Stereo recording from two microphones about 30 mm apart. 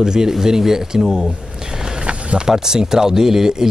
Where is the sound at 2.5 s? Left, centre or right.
Centre.